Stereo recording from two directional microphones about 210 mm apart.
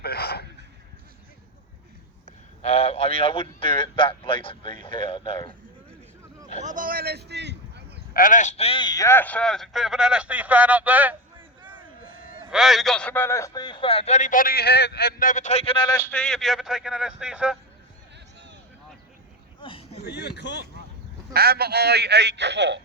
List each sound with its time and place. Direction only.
0.0 s a sound: 50° left (ahead or behind)
2.2 s speech: 30° left (ahead or behind)
6.6 s a man's voice: 40° right (ahead or behind); by 7.5 s 55° right (ahead or behind)
8.1 s speech: 40° left (ahead or behind); by 11.2 s 10° right (ahead or behind)
12.5 s a man's voice: centre (ahead or behind); by 16.0 s 20° left (ahead or behind)
16.0 s speech: 5° left (ahead or behind)
19.6 s a sound: 25° left (ahead or behind)
20.1 s speech: 50° left (ahead or behind)
21.3 s a man's voice: 45° right (ahead or behind)